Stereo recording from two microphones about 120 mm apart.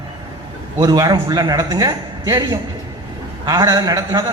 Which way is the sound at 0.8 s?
35° right (ahead or behind).